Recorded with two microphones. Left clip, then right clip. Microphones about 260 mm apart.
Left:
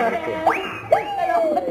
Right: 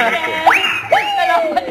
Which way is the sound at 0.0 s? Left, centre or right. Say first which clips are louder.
Right 7 dB; centre.